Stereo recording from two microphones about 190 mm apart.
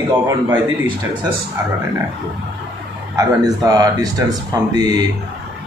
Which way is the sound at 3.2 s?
20° right (ahead or behind).